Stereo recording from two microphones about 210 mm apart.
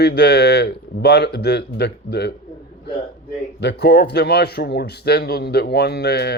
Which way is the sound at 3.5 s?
55° left (ahead or behind).